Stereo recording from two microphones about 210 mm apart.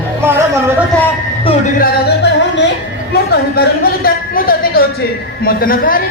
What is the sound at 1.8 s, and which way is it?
Music, 55° left (ahead or behind).